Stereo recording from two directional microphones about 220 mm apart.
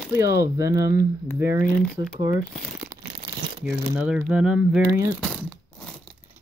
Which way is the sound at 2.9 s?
10° right (ahead or behind).